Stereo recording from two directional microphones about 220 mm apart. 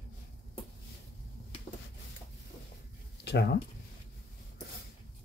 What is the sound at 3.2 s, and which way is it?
Speech, 50° left (ahead or behind).